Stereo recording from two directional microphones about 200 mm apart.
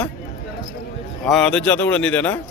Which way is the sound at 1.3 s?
5° left (ahead or behind).